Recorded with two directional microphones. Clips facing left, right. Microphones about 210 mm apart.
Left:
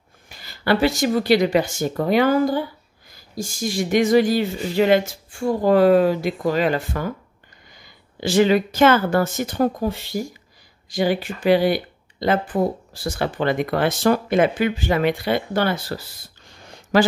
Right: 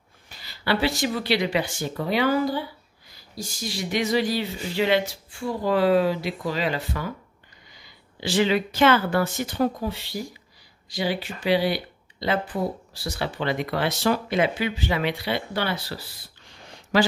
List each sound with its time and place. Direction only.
0.4 s a woman's voice: 45° left (ahead or behind)